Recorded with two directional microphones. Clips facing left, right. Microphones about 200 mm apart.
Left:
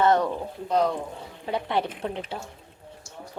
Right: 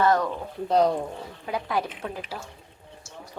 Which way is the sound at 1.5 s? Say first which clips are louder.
Left 2 dB; 30° left (ahead or behind).